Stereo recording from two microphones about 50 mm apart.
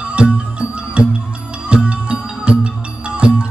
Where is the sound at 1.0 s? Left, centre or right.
Right.